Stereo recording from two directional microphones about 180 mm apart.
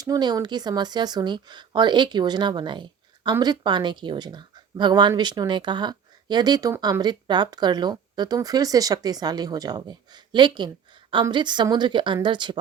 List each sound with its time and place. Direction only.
0.0 s speech: 20° right (ahead or behind)